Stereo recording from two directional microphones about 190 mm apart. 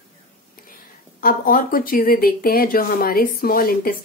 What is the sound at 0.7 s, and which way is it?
Speech, 50° left (ahead or behind).